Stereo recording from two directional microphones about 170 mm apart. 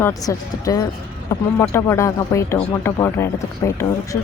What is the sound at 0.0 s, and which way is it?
Speech, 20° left (ahead or behind).